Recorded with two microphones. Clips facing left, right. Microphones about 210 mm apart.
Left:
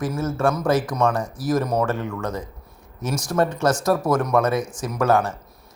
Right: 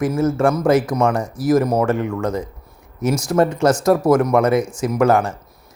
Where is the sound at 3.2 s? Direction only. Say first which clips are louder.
Right 4 dB; 10° right (ahead or behind).